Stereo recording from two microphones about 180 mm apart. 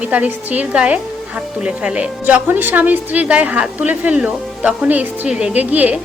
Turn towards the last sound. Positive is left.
turn(degrees=-10)  # may be behind; listen again after turning